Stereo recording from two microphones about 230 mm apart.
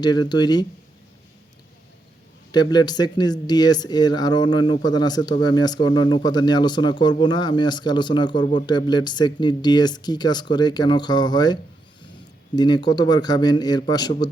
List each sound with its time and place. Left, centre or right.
0.0 s a man's voice: centre
2.5 s a man's voice: centre